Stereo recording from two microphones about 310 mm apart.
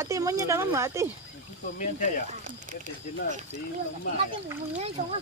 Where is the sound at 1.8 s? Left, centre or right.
Left.